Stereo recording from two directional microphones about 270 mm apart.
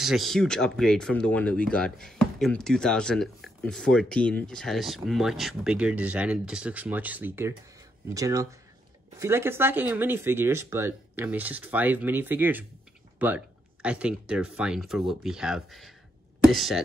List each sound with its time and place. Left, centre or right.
0.0 s speech: centre